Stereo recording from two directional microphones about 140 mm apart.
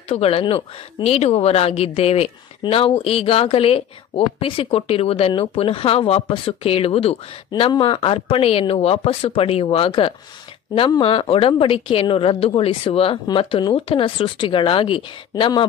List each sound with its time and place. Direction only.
0.1 s a woman's voice: 45° left (ahead or behind)